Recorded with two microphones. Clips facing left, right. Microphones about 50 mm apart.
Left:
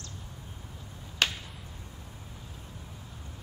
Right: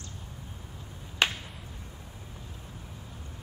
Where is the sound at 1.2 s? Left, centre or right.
Centre.